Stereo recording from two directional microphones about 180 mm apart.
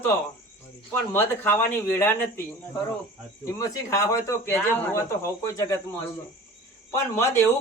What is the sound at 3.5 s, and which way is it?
Speech, 15° left (ahead or behind).